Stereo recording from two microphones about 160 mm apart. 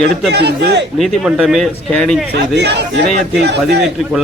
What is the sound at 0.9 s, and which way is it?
Speech, centre (ahead or behind).